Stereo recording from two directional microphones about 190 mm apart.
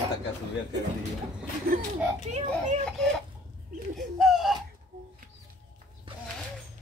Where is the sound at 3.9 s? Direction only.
Centre (ahead or behind).